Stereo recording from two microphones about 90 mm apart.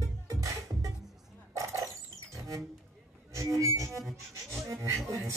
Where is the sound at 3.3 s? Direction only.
35° right (ahead or behind).